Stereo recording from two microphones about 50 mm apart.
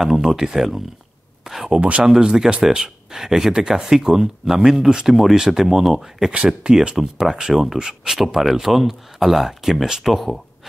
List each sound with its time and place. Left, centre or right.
0.0 s speech: centre
1.4 s a sound: centre
1.8 s speech: right
2.0 s speech: centre
6.3 s speech: centre